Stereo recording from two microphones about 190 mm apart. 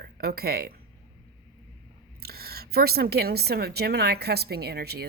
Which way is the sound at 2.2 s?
55° right (ahead or behind).